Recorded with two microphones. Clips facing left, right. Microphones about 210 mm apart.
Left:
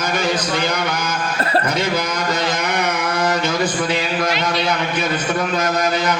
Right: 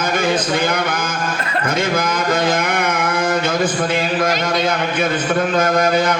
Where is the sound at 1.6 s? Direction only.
50° right (ahead or behind).